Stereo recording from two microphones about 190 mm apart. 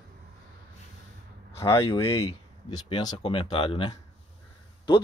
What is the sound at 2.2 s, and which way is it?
Speech, 20° left (ahead or behind).